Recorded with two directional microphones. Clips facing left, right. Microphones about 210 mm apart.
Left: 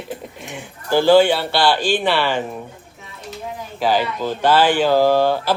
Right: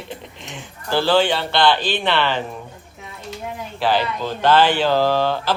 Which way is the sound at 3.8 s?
10° left (ahead or behind).